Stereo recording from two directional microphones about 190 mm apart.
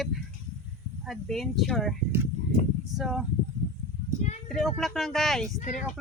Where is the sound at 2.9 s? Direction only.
Centre (ahead or behind).